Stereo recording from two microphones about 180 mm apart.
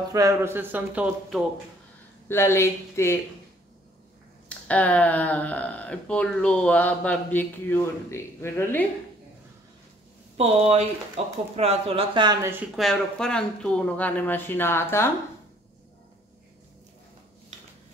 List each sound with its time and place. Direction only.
0.1 s speech: 15° right (ahead or behind)
2.2 s speech: 15° left (ahead or behind)
4.5 s speech: 5° left (ahead or behind)
10.3 s speech: 35° right (ahead or behind)
12.7 s speech: centre (ahead or behind)